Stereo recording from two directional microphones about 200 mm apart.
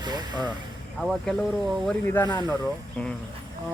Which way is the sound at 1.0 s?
Centre (ahead or behind).